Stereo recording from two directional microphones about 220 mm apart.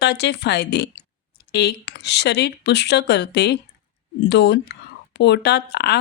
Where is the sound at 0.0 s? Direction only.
50° left (ahead or behind).